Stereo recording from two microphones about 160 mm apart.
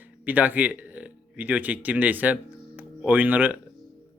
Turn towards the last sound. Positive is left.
turn(degrees=-10)  # may be behind; listen again after turning